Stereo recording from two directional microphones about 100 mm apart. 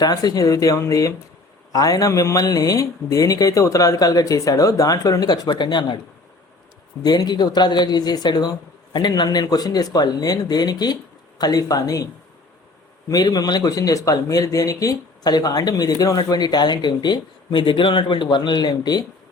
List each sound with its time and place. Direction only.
0.0 s speech: 40° left (ahead or behind)
5.5 s speech: 50° left (ahead or behind)
7.0 s speech: 40° left (ahead or behind)
13.1 s speech: 40° left (ahead or behind)